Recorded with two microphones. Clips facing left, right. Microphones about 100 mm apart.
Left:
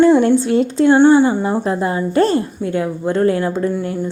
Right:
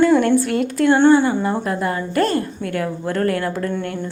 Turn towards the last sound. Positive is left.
turn(degrees=10)  # may be behind; listen again after turning